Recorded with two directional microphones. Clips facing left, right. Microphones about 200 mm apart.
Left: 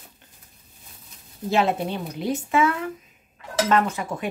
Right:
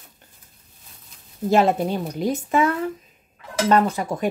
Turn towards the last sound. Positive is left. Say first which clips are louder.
# right 3 dB
turn(degrees=-35)  # may be behind; listen again after turning